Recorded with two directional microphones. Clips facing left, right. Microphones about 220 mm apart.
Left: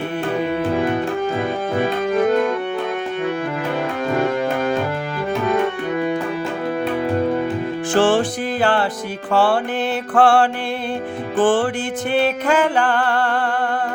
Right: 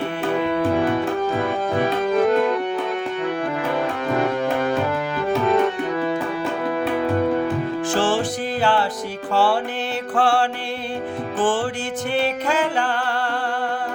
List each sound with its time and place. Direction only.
7.9 s music: 55° left (ahead or behind)